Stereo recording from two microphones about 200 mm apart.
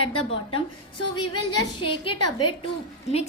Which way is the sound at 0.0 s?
25° left (ahead or behind).